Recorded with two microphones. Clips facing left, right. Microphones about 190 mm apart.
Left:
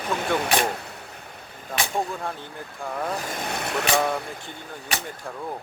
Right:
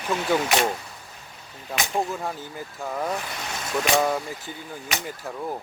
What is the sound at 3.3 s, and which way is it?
Speech, 55° left (ahead or behind).